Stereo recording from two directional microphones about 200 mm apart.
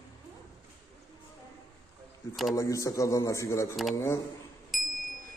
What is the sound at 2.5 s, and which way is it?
A man's voice, 15° left (ahead or behind).